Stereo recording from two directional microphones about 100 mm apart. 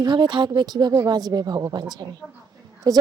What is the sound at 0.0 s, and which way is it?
Speech, 50° right (ahead or behind).